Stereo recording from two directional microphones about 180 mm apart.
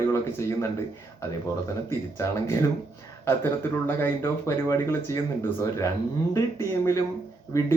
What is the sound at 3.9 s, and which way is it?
Speech, 10° left (ahead or behind).